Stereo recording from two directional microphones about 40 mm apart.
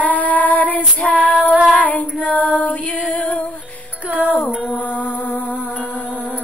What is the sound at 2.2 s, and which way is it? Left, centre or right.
Female singing, left.